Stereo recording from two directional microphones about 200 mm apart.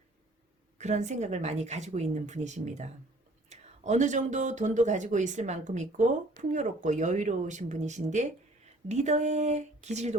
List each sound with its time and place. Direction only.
0.8 s speech: 35° right (ahead or behind)